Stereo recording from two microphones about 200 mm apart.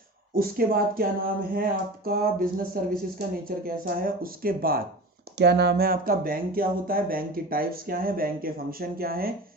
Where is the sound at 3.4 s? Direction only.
45° right (ahead or behind).